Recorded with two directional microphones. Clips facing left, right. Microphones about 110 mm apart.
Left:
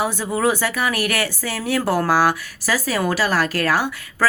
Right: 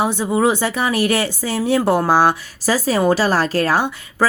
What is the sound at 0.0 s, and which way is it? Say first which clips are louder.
Speech: right 3 dB; 20° right (ahead or behind).